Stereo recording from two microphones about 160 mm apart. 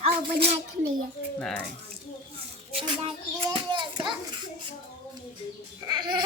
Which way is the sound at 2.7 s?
35° right (ahead or behind).